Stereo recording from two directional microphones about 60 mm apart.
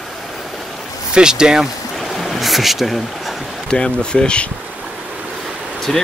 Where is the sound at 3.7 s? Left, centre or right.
Centre.